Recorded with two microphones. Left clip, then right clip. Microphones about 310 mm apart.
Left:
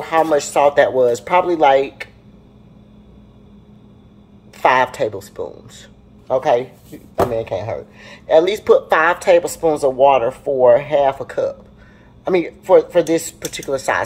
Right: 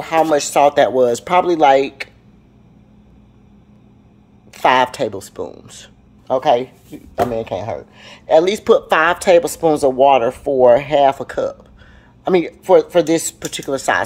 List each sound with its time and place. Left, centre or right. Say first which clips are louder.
0.0 s speech: right 1 dB; right
4.6 s speech: right 1 dB; right